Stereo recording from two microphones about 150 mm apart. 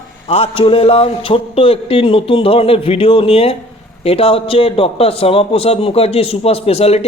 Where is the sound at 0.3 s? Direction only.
40° left (ahead or behind).